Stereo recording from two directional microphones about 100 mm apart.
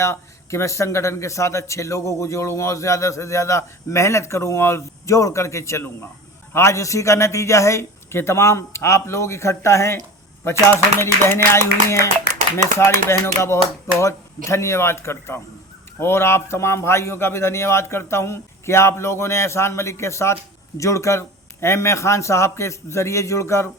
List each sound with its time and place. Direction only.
0.0 s a man's voice: 30° left (ahead or behind)
11.0 s a man's voice: 25° left (ahead or behind)